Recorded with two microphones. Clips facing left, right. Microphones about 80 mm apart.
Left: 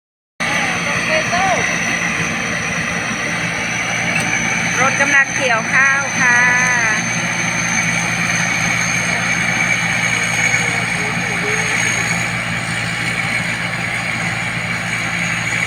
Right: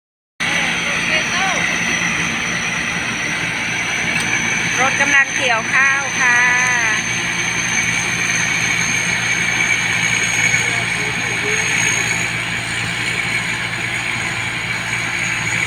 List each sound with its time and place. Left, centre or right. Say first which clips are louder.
1.1 s vehicle: left 5 dB; centre
4.8 s vehicle: left 1 dB; centre